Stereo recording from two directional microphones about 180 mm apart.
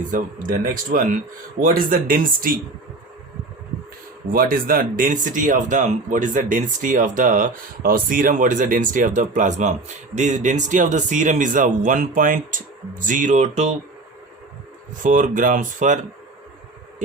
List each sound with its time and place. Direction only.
0.1 s speech: 50° right (ahead or behind)
4.3 s speech: 50° right (ahead or behind)
15.0 s speech: 45° right (ahead or behind)